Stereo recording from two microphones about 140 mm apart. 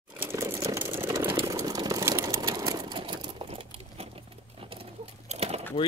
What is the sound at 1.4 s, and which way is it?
Sewing machine, 25° right (ahead or behind).